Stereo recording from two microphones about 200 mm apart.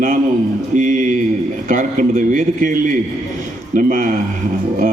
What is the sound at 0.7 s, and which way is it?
A man's voice, 40° right (ahead or behind).